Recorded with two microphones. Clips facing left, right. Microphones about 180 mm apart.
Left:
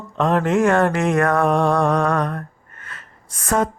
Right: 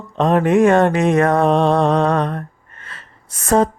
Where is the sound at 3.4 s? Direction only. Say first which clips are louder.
Right 5 dB; 30° right (ahead or behind).